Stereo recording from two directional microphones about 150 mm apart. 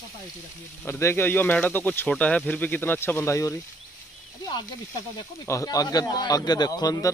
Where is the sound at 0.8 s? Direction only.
15° left (ahead or behind).